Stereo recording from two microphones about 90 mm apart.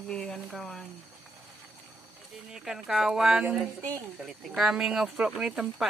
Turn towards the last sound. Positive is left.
turn(degrees=-5)  # may be behind; listen again after turning